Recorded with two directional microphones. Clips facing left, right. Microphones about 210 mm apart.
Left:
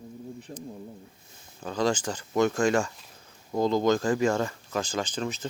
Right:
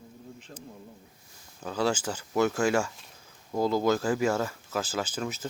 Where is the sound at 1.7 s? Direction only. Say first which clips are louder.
Left 1 dB; 10° right (ahead or behind).